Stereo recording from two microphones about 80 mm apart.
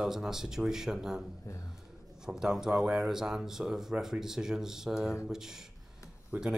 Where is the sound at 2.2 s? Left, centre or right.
Centre.